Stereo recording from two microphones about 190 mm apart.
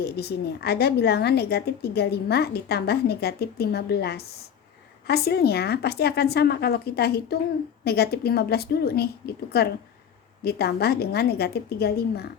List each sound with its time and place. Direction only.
0.0 s a woman's voice: 55° left (ahead or behind)